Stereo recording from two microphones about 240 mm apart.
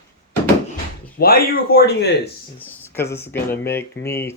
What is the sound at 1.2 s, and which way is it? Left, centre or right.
Speech, left.